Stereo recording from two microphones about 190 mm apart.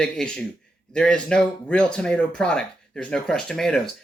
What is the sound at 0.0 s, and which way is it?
Speech, 5° left (ahead or behind).